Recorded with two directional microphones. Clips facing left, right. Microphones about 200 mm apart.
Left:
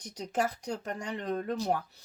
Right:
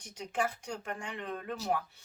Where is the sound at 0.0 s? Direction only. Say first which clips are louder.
Left 3 dB; 40° left (ahead or behind).